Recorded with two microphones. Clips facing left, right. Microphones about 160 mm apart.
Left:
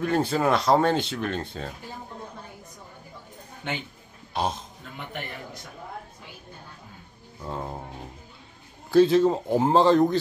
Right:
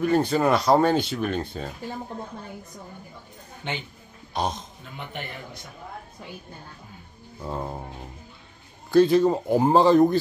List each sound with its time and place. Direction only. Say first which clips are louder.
0.0 s speech: right 2 dB; centre (ahead or behind)
4.3 s a man's voice: even; 5° left (ahead or behind)
7.4 s speech: right 2 dB; 5° right (ahead or behind)
8.9 s speech: even; centre (ahead or behind)